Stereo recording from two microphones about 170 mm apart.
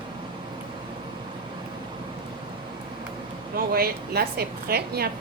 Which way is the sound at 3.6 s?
65° right (ahead or behind).